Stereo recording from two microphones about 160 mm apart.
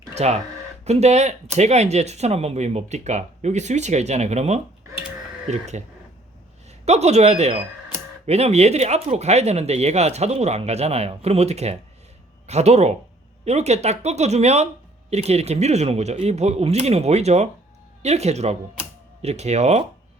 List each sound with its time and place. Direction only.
0.2 s speech: 45° right (ahead or behind)